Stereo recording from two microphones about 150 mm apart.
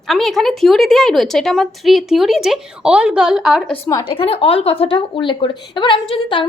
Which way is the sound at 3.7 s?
20° left (ahead or behind).